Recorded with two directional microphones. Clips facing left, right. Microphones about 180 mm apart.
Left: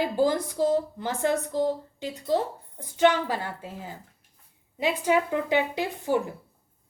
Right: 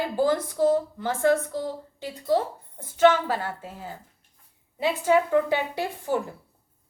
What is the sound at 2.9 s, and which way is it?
Speech, 15° left (ahead or behind).